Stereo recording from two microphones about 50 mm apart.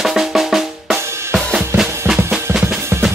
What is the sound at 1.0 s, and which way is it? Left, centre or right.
Drum kit, right.